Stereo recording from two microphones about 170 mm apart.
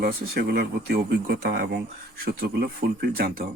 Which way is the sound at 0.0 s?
70° right (ahead or behind).